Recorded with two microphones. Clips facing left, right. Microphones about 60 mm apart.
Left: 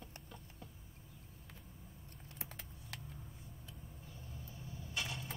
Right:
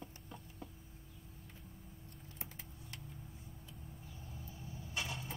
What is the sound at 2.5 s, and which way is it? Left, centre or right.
Computer keyboard, left.